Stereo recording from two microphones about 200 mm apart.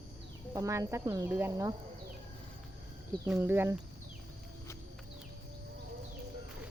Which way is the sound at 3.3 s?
10° right (ahead or behind).